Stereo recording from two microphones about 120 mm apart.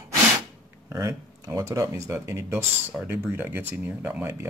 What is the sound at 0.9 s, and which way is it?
Speech, 25° right (ahead or behind).